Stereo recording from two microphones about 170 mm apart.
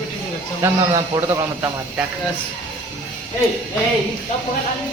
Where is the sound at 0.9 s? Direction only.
15° right (ahead or behind).